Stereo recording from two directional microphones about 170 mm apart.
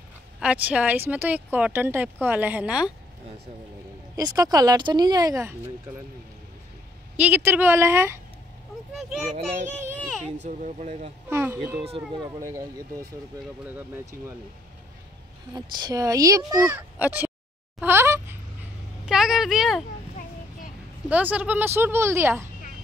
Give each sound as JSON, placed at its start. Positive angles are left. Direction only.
{"t": 0.4, "sound": "speech", "side_deg": -10}
{"t": 4.2, "sound": "speech", "side_deg": -20}
{"t": 7.2, "sound": "speech", "side_deg": -10}
{"t": 10.4, "sound": "speech", "side_deg": -45}
{"t": 11.2, "sound": "speech", "side_deg": -15}
{"t": 15.5, "sound": "speech", "side_deg": -25}
{"t": 17.7, "sound": "a sound", "side_deg": -10}
{"t": 19.0, "sound": "a sound", "side_deg": -5}
{"t": 21.1, "sound": "speech", "side_deg": -10}